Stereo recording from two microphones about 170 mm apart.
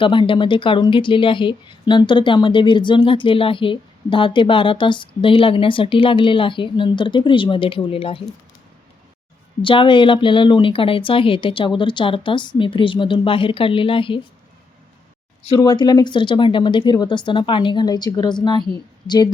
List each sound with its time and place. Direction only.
0.0 s speech: 30° left (ahead or behind)
9.6 s speech: 30° left (ahead or behind)
15.4 s speech: 25° left (ahead or behind)